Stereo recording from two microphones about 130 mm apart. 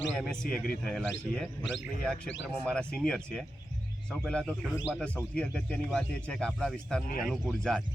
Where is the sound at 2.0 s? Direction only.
5° left (ahead or behind).